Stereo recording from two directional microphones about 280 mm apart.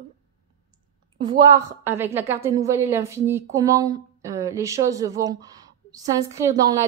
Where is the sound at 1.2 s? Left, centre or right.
Centre.